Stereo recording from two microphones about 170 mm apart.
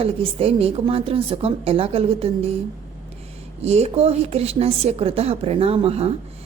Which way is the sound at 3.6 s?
40° right (ahead or behind).